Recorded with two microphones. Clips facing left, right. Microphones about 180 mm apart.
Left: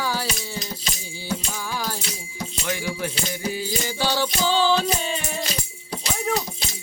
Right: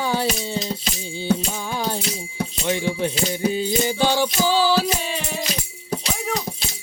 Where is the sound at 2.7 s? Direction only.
25° right (ahead or behind); by 4.9 s 10° right (ahead or behind).